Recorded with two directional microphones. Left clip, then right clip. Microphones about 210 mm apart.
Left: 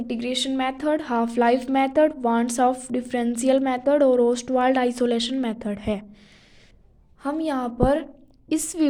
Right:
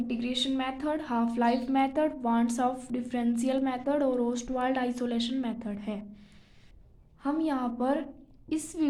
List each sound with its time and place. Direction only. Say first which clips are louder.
0.1 s a woman's voice: left 7 dB; 40° left (ahead or behind)
7.2 s a woman's voice: left 4 dB; 45° left (ahead or behind)